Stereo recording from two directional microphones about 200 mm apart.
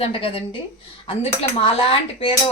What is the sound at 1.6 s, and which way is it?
Speech, 25° left (ahead or behind).